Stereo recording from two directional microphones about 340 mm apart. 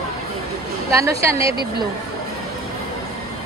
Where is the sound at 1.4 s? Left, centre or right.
Centre.